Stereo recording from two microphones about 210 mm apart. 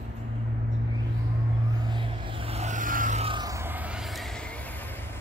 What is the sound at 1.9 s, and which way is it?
Vehicle, 25° right (ahead or behind).